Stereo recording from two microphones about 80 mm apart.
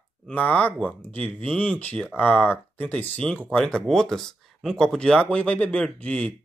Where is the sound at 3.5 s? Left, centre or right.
Centre.